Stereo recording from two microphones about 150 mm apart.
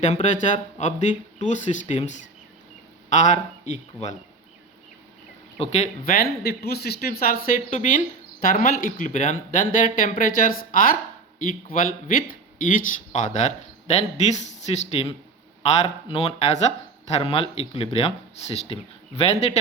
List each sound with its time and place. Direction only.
0.0 s speech: 50° left (ahead or behind)
5.5 s speech: 50° left (ahead or behind)
6.1 s speech: 90° left
7.7 s speech: 55° left (ahead or behind)